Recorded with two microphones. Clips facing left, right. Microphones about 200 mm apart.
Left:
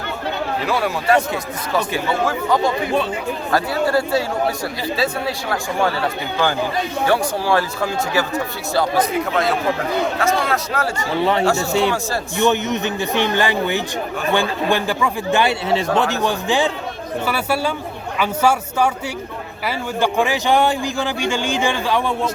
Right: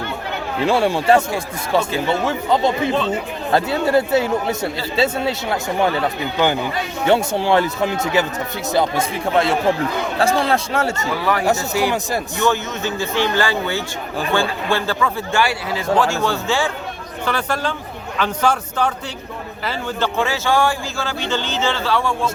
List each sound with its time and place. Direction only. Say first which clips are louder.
0.6 s speech: right 7 dB; 30° right (ahead or behind)
2.2 s speech: left 1 dB; 25° right (ahead or behind)
7.0 s speech: right 3 dB; 25° right (ahead or behind)
11.1 s a man's voice: left 3 dB; 25° left (ahead or behind)